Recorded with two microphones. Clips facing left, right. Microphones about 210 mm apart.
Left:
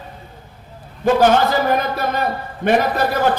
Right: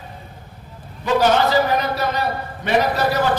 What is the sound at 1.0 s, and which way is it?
A man's voice, 50° left (ahead or behind).